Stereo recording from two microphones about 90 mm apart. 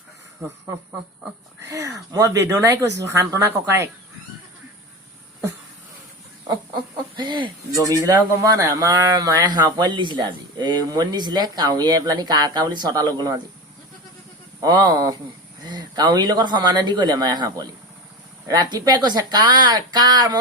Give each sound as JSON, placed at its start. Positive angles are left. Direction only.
{"t": 0.4, "sound": "speech", "side_deg": -30}
{"t": 1.7, "sound": "speech", "side_deg": -40}
{"t": 7.2, "sound": "speech", "side_deg": -60}
{"t": 7.7, "sound": "speech", "side_deg": -40}
{"t": 14.6, "sound": "speech", "side_deg": -45}